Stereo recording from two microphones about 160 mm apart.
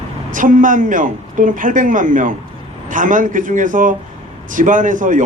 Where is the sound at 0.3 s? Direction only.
55° right (ahead or behind).